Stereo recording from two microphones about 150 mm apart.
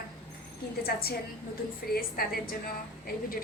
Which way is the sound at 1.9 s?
80° left.